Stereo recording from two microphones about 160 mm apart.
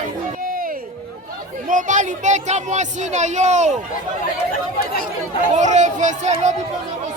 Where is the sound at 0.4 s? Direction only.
60° right (ahead or behind).